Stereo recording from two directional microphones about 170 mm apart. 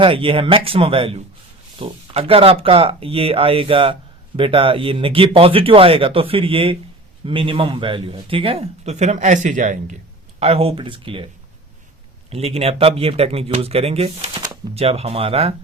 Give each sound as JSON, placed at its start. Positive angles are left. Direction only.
{"t": 0.0, "sound": "speech", "side_deg": -30}
{"t": 10.4, "sound": "speech", "side_deg": -35}
{"t": 12.3, "sound": "speech", "side_deg": -35}